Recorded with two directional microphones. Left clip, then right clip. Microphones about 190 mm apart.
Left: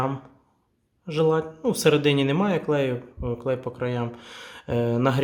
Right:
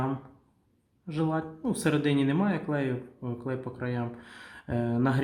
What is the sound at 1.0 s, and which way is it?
Speech, 50° left (ahead or behind).